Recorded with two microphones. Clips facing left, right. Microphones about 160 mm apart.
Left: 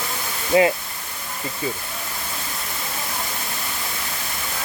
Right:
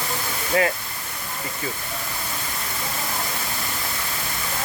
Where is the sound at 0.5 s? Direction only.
20° left (ahead or behind).